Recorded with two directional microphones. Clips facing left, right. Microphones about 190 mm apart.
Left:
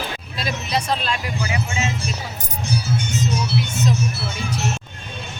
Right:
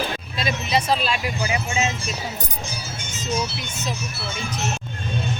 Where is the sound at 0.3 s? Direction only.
Centre (ahead or behind).